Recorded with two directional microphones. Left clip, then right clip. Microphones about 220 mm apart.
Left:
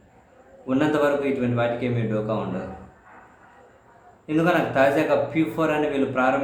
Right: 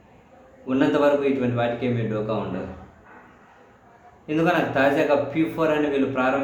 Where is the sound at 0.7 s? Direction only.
5° left (ahead or behind).